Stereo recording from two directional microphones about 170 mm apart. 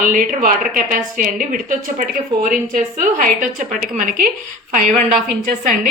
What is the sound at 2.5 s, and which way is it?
A woman's voice, 50° right (ahead or behind).